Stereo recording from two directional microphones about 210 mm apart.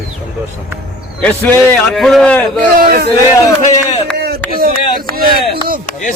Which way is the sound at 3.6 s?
35° left (ahead or behind).